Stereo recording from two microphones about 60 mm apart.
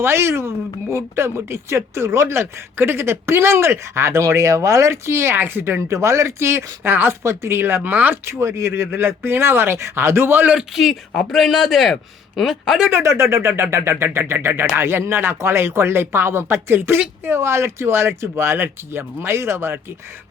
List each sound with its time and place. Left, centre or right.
0.0 s speech: right
5.9 s speech: right
7.2 s speech: right
8.2 s speech: right
10.6 s a man's voice: centre
12.9 s speech: right